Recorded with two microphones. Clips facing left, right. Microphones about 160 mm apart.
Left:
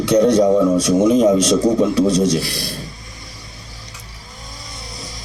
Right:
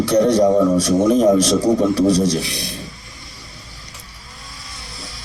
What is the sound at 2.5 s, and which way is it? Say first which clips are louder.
Speech: left 2 dB; 35° left (ahead or behind).